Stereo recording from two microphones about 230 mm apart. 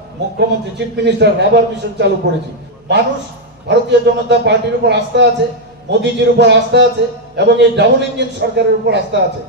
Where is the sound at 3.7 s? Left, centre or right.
Right.